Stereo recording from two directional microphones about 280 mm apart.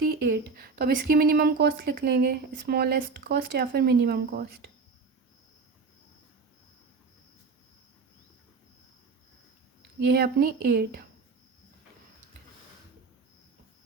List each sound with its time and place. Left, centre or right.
0.0 s speech: right
10.1 s speech: right